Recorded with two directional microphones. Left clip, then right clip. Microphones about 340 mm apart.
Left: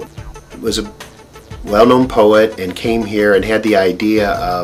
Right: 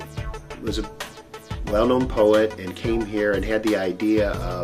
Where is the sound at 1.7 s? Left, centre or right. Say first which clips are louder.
Left 10 dB; centre.